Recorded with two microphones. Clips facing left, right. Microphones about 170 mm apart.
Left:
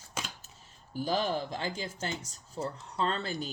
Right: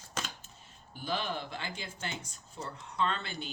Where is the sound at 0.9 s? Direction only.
40° left (ahead or behind).